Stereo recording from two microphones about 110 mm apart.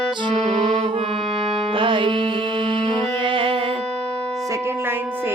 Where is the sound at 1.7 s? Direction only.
50° right (ahead or behind).